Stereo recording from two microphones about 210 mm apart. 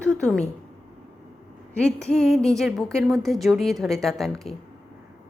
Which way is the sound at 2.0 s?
5° left (ahead or behind).